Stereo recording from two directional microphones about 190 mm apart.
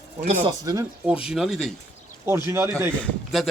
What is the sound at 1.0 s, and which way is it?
Speech, 5° right (ahead or behind).